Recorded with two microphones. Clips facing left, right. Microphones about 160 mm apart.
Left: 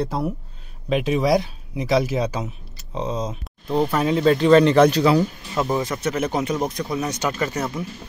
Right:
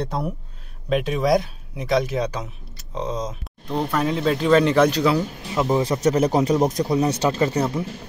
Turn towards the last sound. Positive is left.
turn(degrees=-30)  # may be behind; listen again after turning